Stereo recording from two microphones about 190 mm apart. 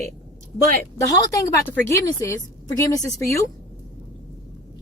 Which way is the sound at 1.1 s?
20° left (ahead or behind).